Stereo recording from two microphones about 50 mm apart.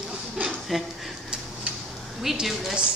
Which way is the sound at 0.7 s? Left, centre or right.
Centre.